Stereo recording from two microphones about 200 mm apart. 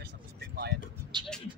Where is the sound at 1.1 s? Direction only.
20° right (ahead or behind).